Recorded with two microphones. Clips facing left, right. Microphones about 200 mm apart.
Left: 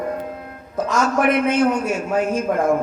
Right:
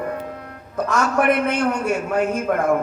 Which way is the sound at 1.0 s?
60° right (ahead or behind).